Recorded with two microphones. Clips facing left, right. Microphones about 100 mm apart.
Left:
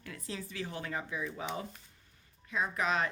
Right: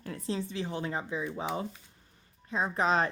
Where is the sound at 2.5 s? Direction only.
30° right (ahead or behind).